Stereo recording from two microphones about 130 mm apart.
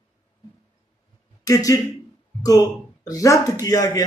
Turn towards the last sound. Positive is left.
turn(degrees=30)  # may be behind; listen again after turning